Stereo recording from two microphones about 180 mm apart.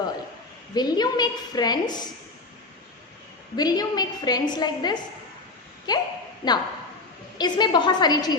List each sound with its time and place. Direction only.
0.7 s a woman's voice: 25° left (ahead or behind)
3.5 s a woman's voice: 20° left (ahead or behind)